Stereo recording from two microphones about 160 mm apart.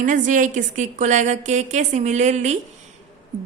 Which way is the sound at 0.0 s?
55° right (ahead or behind).